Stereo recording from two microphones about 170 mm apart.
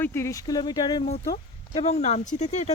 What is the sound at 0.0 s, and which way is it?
Speech, 15° left (ahead or behind).